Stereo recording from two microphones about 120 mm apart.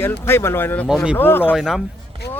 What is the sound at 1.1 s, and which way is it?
Speech, 15° left (ahead or behind).